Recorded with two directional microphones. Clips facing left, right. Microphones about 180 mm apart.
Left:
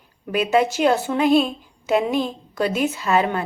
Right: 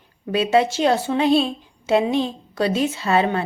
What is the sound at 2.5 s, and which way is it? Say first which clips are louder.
Speech: right 1 dB; 30° right (ahead or behind).